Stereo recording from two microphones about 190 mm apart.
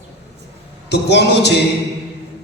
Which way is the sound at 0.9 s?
65° left (ahead or behind).